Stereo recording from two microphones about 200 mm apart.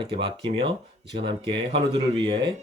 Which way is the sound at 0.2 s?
25° right (ahead or behind).